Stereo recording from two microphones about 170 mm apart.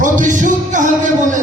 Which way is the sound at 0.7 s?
50° right (ahead or behind).